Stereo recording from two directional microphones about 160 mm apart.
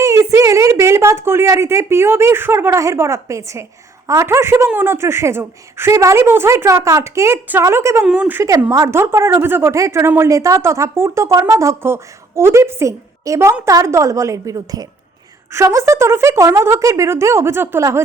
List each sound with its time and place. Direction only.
0.0 s a woman's voice: 20° right (ahead or behind)